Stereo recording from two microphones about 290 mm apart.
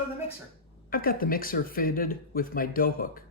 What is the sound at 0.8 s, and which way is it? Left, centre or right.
Speech, left.